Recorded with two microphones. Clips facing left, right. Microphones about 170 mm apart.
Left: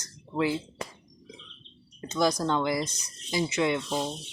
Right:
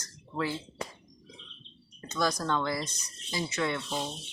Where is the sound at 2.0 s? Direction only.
20° left (ahead or behind).